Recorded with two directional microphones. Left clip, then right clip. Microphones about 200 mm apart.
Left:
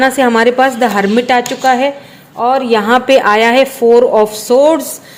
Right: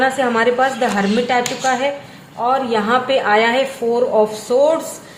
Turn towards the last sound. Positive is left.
turn(degrees=45)  # may be behind; listen again after turning